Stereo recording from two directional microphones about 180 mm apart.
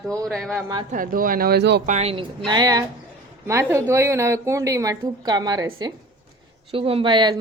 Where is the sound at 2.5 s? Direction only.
20° right (ahead or behind).